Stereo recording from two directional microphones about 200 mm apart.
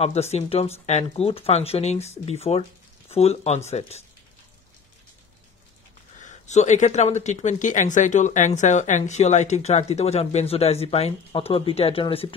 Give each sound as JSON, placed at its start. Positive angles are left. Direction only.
{"t": 0.0, "sound": "speech", "side_deg": 30}
{"t": 6.1, "sound": "speech", "side_deg": 35}